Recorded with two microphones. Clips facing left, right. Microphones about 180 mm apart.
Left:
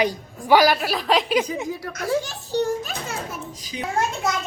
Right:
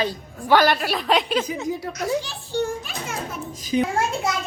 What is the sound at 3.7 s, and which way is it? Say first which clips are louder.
Speech: right 11 dB; 45° right (ahead or behind).